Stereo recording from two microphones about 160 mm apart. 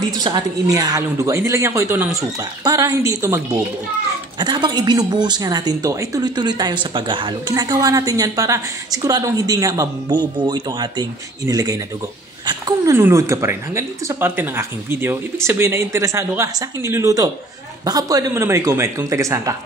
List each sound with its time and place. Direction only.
0.2 s speech: 25° right (ahead or behind)